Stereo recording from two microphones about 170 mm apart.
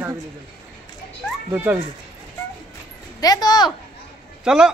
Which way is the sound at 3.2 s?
20° left (ahead or behind).